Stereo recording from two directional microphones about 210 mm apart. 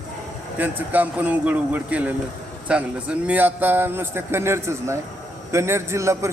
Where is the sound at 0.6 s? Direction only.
5° right (ahead or behind).